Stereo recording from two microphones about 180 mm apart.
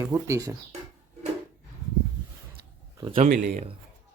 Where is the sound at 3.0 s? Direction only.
30° right (ahead or behind).